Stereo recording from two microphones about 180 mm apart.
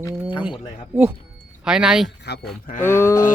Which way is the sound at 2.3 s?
70° left (ahead or behind).